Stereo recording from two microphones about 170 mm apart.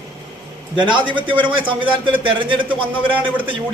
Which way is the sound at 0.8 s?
30° right (ahead or behind).